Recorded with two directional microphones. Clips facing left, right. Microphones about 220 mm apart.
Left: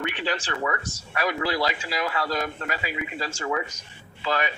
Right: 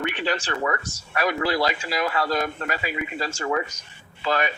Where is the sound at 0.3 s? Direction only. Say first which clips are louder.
Right 2 dB; 45° right (ahead or behind).